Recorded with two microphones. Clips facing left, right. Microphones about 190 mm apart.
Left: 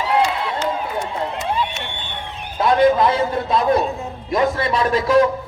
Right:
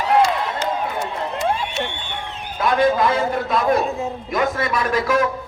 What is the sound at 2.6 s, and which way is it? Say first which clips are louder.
A man's voice: left 3 dB; 25° left (ahead or behind).